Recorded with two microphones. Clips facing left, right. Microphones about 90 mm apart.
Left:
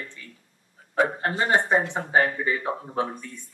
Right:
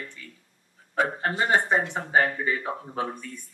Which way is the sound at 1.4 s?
20° left (ahead or behind).